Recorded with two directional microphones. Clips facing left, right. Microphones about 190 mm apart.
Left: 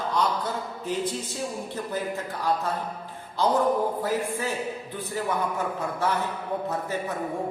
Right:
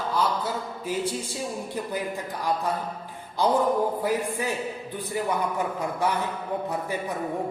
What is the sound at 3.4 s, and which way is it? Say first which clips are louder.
Speech: even; 15° right (ahead or behind).